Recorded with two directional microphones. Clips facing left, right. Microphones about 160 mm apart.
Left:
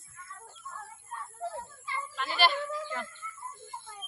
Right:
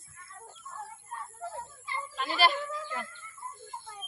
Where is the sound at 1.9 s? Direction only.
35° right (ahead or behind).